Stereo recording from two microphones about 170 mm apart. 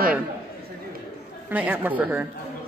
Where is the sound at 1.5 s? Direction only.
10° right (ahead or behind).